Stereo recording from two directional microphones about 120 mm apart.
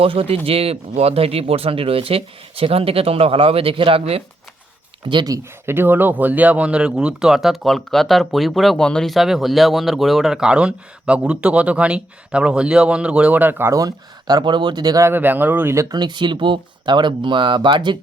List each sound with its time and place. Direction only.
0.0 s speech: 50° right (ahead or behind)
5.0 s speech: 40° right (ahead or behind)
5.3 s speech: 20° right (ahead or behind); by 15.0 s 35° right (ahead or behind)
15.0 s speech: 15° right (ahead or behind)
16.0 s speech: 40° right (ahead or behind)